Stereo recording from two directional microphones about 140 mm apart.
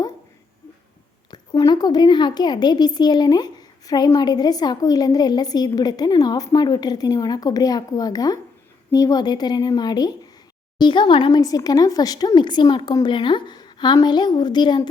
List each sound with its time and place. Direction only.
1.3 s a woman's voice: 30° left (ahead or behind)